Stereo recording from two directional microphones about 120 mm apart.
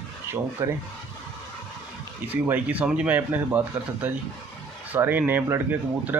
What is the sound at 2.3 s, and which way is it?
Speech, 15° right (ahead or behind).